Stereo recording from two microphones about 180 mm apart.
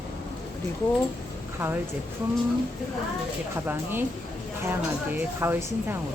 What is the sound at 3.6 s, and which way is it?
Speech, 10° right (ahead or behind).